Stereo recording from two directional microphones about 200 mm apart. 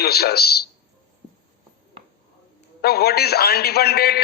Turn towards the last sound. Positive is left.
turn(degrees=50)  # may be behind; listen again after turning